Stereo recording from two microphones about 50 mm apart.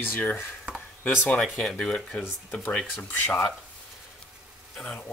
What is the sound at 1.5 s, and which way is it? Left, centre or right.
Speech, centre.